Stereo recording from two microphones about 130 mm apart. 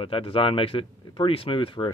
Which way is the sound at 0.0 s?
45° left (ahead or behind).